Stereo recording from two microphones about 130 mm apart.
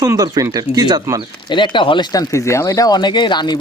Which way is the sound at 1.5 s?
35° left (ahead or behind).